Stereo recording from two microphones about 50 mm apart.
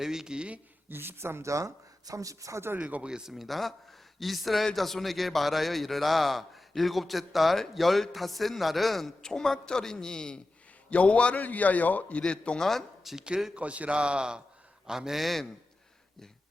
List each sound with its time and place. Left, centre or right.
0.0 s speech: centre
0.9 s speech: right
2.7 s speech: right
3.3 s a man's voice: centre
10.8 s a man's voice: left
12.2 s a man's voice: left
12.5 s speech: centre
13.1 s a man's voice: centre